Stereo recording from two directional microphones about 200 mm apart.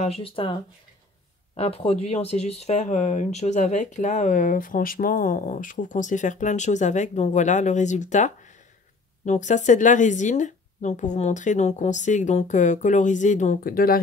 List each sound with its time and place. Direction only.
0.0 s speech: 30° left (ahead or behind)
1.6 s speech: 30° left (ahead or behind); by 13.9 s 45° left (ahead or behind)